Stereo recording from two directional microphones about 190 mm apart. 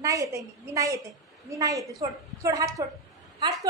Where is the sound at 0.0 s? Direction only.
15° right (ahead or behind).